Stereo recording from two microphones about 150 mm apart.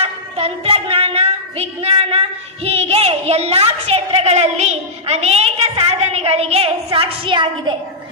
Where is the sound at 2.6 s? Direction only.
45° right (ahead or behind).